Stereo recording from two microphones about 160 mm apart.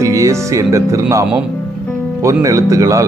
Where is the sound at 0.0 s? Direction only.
20° right (ahead or behind).